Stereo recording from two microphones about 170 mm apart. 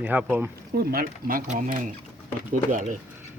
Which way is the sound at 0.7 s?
60° right (ahead or behind).